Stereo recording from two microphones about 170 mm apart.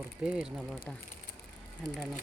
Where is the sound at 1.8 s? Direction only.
Centre (ahead or behind).